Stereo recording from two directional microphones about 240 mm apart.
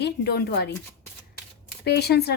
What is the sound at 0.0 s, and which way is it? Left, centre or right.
Speech, left.